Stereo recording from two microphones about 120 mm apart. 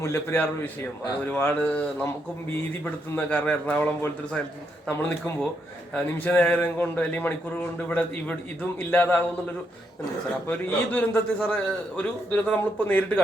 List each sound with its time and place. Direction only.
0.0 s a man's voice: 20° left (ahead or behind)
10.5 s a man's voice: 15° left (ahead or behind)